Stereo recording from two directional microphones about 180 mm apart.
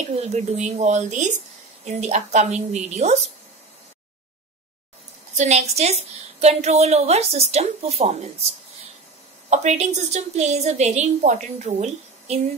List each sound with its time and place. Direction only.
0.1 s a woman's voice: 35° right (ahead or behind)
5.3 s a woman's voice: 40° right (ahead or behind)
9.5 s a woman's voice: 40° right (ahead or behind)